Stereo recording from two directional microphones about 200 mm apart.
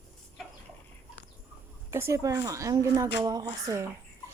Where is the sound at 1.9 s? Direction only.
15° right (ahead or behind).